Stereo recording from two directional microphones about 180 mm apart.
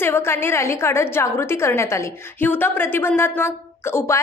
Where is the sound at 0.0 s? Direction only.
15° left (ahead or behind).